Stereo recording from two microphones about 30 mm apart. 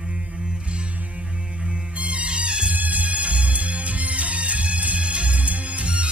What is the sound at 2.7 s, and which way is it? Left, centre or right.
Music, right.